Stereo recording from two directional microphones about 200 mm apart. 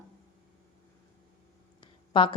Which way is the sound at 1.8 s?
25° left (ahead or behind).